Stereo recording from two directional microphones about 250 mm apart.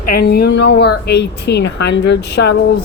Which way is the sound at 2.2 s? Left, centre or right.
Left.